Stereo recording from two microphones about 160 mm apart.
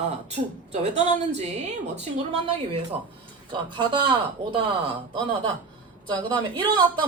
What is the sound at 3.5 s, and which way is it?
Speech, 30° right (ahead or behind).